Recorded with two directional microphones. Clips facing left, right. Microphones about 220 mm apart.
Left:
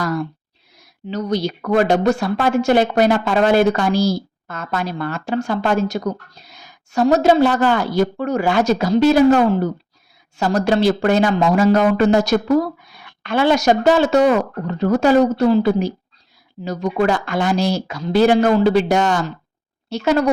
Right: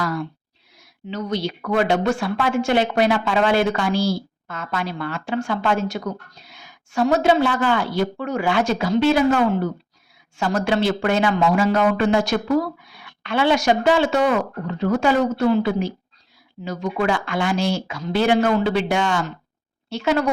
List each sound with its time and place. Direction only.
1.0 s speech: 40° left (ahead or behind)